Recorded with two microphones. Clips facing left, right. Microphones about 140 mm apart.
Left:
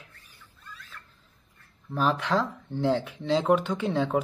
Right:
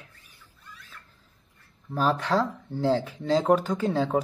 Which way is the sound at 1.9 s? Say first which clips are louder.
Right 1 dB; 40° right (ahead or behind).